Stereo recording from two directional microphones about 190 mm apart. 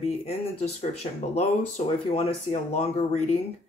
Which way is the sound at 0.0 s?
35° left (ahead or behind).